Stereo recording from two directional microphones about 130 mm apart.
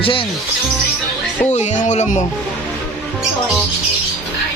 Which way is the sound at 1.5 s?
65° left (ahead or behind).